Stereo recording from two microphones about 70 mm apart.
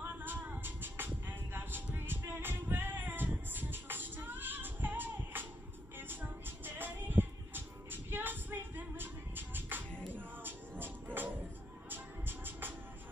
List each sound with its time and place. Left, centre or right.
0.0 s music: right